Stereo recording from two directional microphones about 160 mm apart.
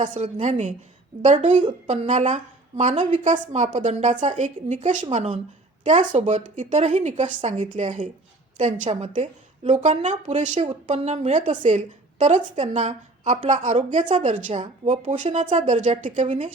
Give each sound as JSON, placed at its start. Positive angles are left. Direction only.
{"t": 0.0, "sound": "a woman's voice", "side_deg": -50}